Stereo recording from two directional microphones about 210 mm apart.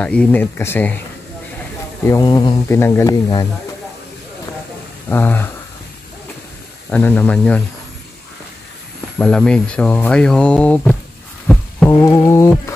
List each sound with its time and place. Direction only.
0.0 s speech: 5° left (ahead or behind)
2.0 s speech: 15° left (ahead or behind)
5.1 s speech: 10° left (ahead or behind)
6.9 s speech: 10° left (ahead or behind)
9.2 s speech: 5° left (ahead or behind)
11.5 s a sound: 5° left (ahead or behind)
11.9 s speech: 10° left (ahead or behind)